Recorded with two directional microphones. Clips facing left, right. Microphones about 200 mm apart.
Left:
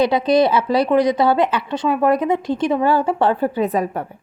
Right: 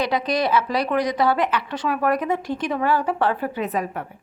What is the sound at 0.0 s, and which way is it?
A woman's voice, 25° left (ahead or behind).